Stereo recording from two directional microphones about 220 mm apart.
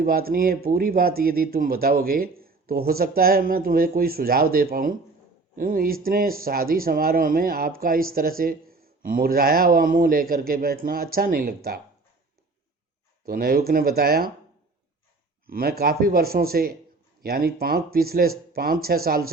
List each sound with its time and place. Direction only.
0.0 s speech: 40° right (ahead or behind)
13.2 s speech: 45° right (ahead or behind)
15.4 s speech: 45° right (ahead or behind)